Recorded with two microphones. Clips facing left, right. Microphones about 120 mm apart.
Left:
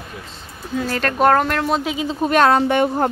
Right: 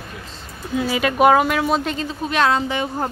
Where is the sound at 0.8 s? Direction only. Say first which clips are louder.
Right 1 dB; 10° right (ahead or behind).